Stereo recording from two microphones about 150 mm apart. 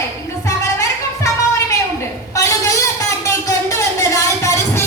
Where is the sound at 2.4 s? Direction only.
20° left (ahead or behind).